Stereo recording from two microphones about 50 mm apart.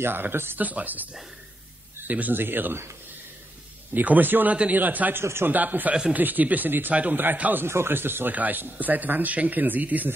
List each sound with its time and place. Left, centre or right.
0.0 s speech: right
0.6 s speech: right
2.0 s speech: right
3.9 s speech: right
5.2 s a man's voice: right
5.5 s speech: right
6.9 s speech: right
7.6 s speech: right
8.3 s speech: right